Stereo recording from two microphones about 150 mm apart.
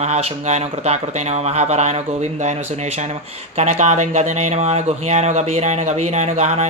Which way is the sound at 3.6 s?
50° right (ahead or behind).